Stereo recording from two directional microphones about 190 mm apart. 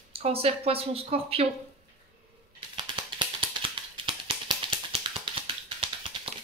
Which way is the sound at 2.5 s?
25° right (ahead or behind).